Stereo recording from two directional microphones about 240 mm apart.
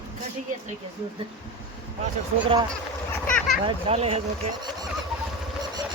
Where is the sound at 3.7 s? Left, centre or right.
Right.